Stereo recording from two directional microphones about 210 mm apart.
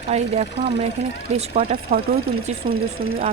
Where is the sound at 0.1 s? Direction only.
30° right (ahead or behind).